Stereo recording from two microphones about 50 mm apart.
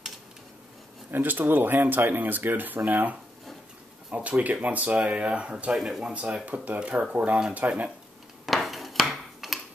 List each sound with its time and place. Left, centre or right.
1.1 s speech: right
5.8 s speech: centre
6.1 s speech: right
8.5 s a sound: centre